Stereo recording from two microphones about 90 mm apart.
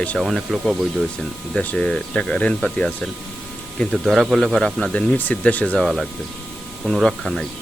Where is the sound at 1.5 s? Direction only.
10° left (ahead or behind).